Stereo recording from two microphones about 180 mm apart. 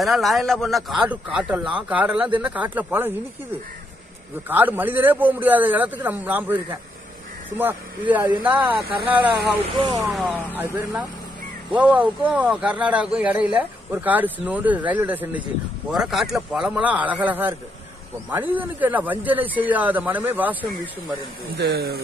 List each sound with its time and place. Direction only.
0.0 s a man's voice: centre (ahead or behind)
4.5 s a man's voice: 10° right (ahead or behind)
9.8 s speech: 20° right (ahead or behind)
10.0 s a man's voice: centre (ahead or behind)
21.5 s speech: 60° right (ahead or behind)